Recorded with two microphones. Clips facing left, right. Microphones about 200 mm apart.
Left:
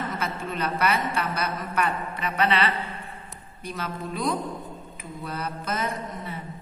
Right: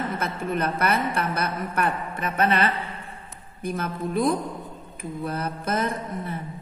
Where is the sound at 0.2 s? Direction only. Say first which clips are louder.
Right 3 dB; 55° right (ahead or behind).